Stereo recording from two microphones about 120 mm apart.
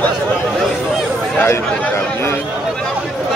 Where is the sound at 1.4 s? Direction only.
20° left (ahead or behind).